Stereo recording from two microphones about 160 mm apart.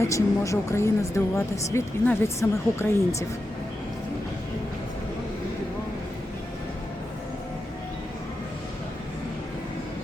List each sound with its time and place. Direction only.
0.0 s speech: 20° left (ahead or behind)